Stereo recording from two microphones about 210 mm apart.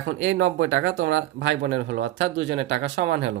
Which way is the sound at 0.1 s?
60° right (ahead or behind).